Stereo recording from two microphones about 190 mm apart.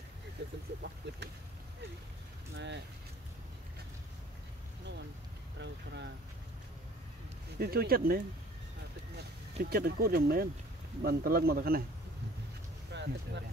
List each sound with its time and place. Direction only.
1.0 s speech: 70° right (ahead or behind)
2.5 s speech: 65° right (ahead or behind)
7.5 s speech: 55° right (ahead or behind)
9.6 s speech: 55° right (ahead or behind)
12.9 s speech: 65° right (ahead or behind)